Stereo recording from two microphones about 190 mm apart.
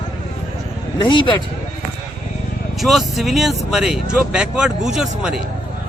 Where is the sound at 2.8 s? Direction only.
Centre (ahead or behind).